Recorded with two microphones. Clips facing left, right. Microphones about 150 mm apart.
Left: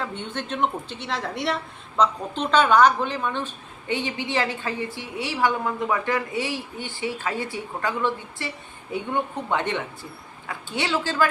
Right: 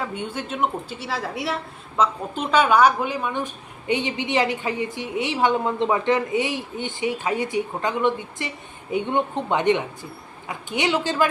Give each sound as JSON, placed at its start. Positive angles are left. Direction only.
{"t": 0.0, "sound": "a woman's voice", "side_deg": -10}